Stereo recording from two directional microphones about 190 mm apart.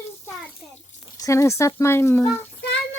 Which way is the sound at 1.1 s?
15° left (ahead or behind).